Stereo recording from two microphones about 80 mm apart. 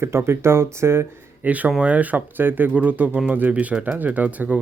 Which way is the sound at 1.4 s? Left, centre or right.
Centre.